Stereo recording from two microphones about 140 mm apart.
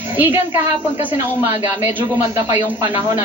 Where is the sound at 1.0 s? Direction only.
15° right (ahead or behind).